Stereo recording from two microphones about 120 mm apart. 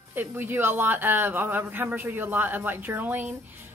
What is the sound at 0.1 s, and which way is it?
Speech, 15° right (ahead or behind).